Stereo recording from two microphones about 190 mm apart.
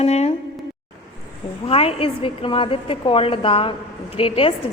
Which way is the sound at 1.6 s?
30° left (ahead or behind).